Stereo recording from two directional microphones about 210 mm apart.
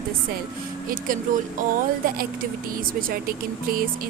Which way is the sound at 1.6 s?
45° right (ahead or behind).